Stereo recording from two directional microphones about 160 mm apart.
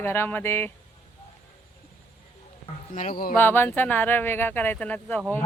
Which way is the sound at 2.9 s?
55° left (ahead or behind).